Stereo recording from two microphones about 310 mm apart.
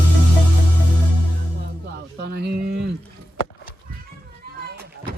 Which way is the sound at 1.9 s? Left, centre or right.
Right.